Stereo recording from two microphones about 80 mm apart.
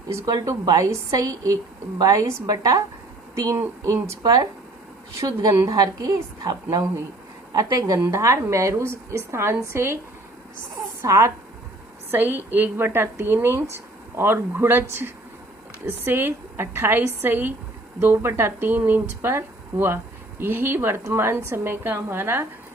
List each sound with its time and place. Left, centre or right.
0.3 s a woman's voice: right
3.8 s speech: right
4.2 s a woman's voice: right
11.0 s speech: right
12.1 s a woman's voice: right